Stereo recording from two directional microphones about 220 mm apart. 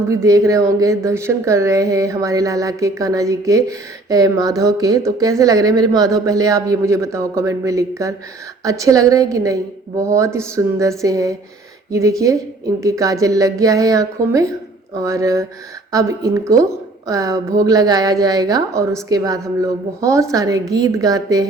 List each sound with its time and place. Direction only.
0.1 s a woman's voice: 15° right (ahead or behind)